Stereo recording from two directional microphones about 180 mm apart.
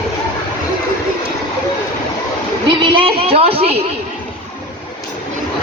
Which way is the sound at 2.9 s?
30° right (ahead or behind).